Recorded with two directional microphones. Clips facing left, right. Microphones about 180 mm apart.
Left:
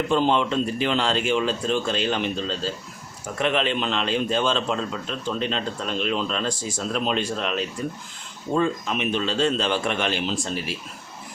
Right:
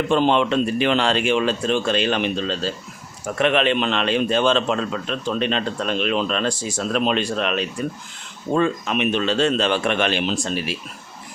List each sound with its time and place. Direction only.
0.1 s a man's voice: 70° right (ahead or behind)